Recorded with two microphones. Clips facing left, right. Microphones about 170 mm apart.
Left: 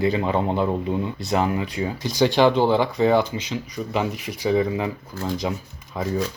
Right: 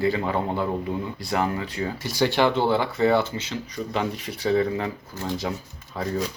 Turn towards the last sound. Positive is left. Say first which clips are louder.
# left 2 dB
turn(degrees=15)  # may be behind; listen again after turning